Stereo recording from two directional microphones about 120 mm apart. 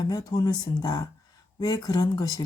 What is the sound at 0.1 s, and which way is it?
Speech, 35° left (ahead or behind).